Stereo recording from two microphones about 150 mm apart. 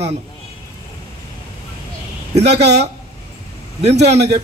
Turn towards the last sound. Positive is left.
turn(degrees=-45)  # may be behind; listen again after turning